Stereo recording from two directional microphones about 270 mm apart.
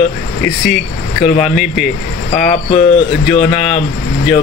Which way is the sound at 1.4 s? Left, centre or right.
Centre.